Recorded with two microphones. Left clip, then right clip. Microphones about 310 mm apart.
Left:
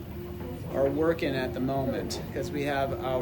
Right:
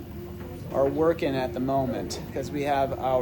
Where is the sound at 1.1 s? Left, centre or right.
Centre.